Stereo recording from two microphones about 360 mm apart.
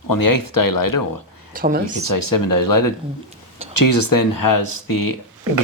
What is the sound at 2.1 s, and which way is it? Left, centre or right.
Speech, left.